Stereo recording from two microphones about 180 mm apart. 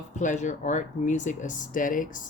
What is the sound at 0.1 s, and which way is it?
Speech, 45° left (ahead or behind).